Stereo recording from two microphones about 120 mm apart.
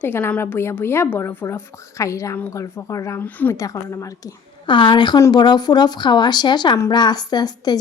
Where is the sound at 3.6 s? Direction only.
25° left (ahead or behind).